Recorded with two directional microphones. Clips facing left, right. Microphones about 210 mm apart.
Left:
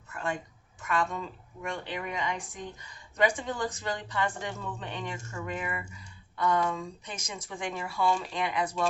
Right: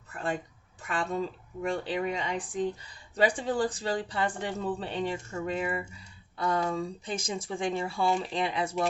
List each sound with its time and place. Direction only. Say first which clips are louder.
0.1 s a woman's voice: right 1 dB; 35° right (ahead or behind)